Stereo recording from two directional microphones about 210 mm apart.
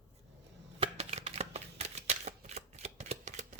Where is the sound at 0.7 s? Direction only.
30° right (ahead or behind).